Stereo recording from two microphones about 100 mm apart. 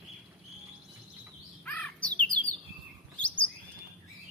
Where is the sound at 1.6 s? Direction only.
15° left (ahead or behind).